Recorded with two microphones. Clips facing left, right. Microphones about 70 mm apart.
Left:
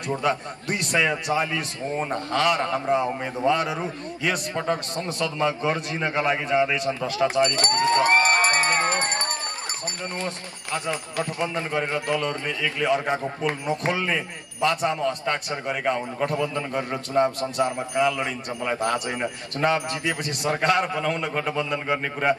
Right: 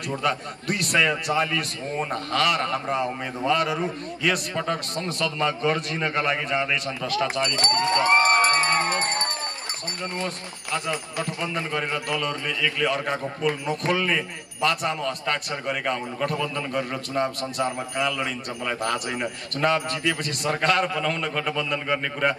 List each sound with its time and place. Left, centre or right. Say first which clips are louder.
0.1 s a man's voice: left 2 dB; centre
10.2 s a man's voice: even; left